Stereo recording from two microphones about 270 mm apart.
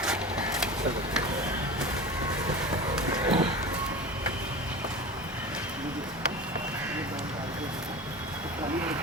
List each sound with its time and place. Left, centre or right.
3.2 s run: centre